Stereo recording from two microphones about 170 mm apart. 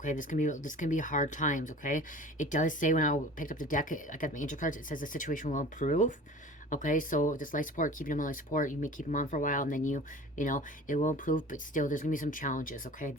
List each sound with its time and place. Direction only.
0.0 s speech: 50° left (ahead or behind)